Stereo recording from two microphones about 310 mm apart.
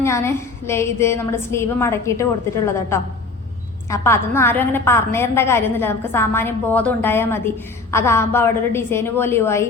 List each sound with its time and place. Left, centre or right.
0.0 s a woman's voice: centre